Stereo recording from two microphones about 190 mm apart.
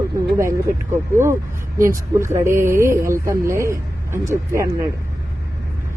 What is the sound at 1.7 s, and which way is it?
Speech, 15° right (ahead or behind).